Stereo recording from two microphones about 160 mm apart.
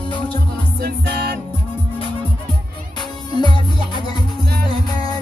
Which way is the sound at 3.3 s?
30° left (ahead or behind).